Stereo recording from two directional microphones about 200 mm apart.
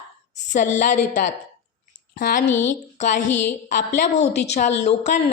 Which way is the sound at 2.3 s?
40° left (ahead or behind).